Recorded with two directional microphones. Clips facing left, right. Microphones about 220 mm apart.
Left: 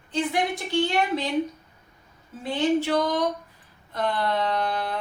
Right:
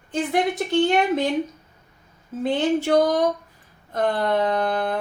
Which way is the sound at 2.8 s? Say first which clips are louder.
Right 5 dB; 45° right (ahead or behind).